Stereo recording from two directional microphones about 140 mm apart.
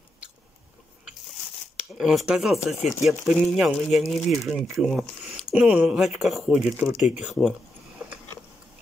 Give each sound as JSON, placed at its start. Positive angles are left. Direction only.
{"t": 1.8, "sound": "speech", "side_deg": -5}